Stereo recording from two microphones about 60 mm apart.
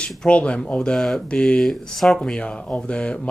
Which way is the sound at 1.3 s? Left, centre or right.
Centre.